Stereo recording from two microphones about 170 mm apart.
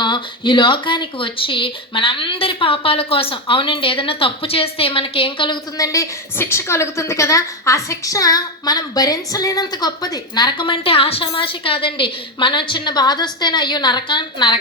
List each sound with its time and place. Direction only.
0.0 s speech: 25° left (ahead or behind)